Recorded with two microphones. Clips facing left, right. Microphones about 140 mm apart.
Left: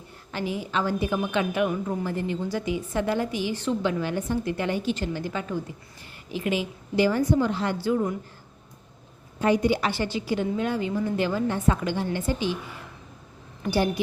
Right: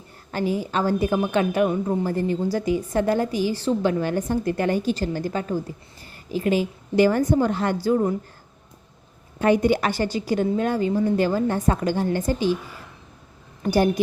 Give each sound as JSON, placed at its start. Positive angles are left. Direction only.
{"t": 0.3, "sound": "a woman's voice", "side_deg": -40}
{"t": 9.4, "sound": "a woman's voice", "side_deg": -55}
{"t": 13.6, "sound": "a woman's voice", "side_deg": -45}